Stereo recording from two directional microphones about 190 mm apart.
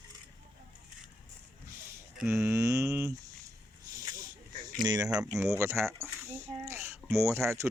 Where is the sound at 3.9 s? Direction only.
15° right (ahead or behind).